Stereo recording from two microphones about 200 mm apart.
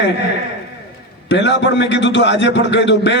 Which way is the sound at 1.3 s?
60° left (ahead or behind).